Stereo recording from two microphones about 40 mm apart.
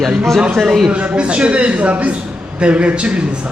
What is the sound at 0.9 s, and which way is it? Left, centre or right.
A man's voice, right.